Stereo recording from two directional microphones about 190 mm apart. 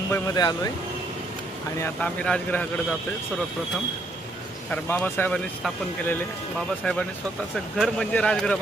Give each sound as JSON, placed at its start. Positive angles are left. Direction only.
{"t": 0.1, "sound": "speech", "side_deg": 20}
{"t": 1.8, "sound": "a man's voice", "side_deg": 5}
{"t": 4.7, "sound": "a man's voice", "side_deg": 10}
{"t": 6.8, "sound": "speech", "side_deg": 5}